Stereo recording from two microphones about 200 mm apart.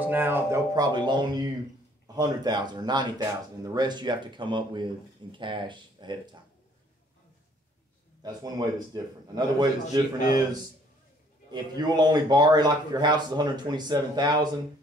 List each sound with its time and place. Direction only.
0.0 s speech: 10° right (ahead or behind)
8.2 s a man's voice: 20° right (ahead or behind)
11.5 s speech: 20° right (ahead or behind)